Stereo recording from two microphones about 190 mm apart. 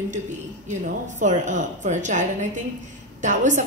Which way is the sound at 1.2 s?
40° right (ahead or behind).